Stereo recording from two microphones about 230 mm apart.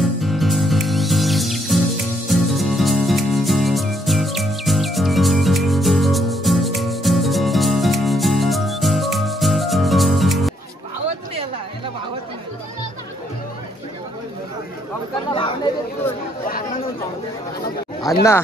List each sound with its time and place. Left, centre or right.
0.0 s music: centre
16.4 s chatter: left
18.1 s a sound: centre